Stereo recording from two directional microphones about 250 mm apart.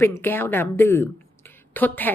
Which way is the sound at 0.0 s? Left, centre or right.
Centre.